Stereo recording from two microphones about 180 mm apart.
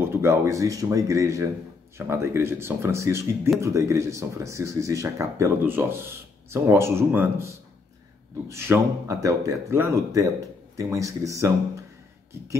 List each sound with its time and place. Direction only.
0.0 s speech: 15° right (ahead or behind)